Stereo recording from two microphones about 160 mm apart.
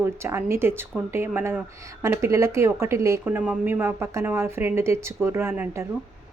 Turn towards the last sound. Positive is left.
turn(degrees=-15)  # may be behind; listen again after turning